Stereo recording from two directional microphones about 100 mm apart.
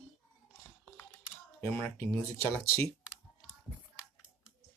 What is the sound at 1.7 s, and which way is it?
Speech, 25° left (ahead or behind).